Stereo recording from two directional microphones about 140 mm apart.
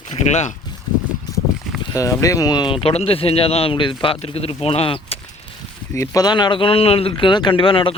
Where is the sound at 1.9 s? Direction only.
25° left (ahead or behind); by 5.1 s 45° left (ahead or behind).